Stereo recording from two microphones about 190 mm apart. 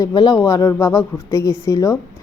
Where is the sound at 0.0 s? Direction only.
20° left (ahead or behind).